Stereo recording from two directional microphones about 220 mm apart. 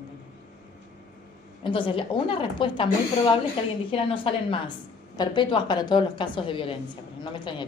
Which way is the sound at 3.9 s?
25° left (ahead or behind).